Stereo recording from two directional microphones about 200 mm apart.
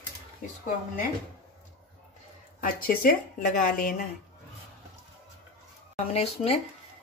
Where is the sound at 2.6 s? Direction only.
45° left (ahead or behind).